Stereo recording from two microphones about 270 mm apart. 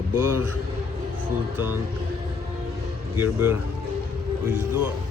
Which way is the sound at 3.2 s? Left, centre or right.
Centre.